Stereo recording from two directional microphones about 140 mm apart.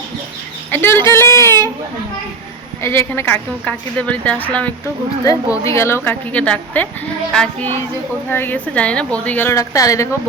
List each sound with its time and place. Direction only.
0.7 s a woman's voice: 15° left (ahead or behind)
2.8 s a woman's voice: 20° left (ahead or behind)
5.2 s speech: 25° left (ahead or behind); by 6.8 s 10° left (ahead or behind)
7.3 s child singing: 5° left (ahead or behind)
8.3 s a woman's voice: 15° left (ahead or behind)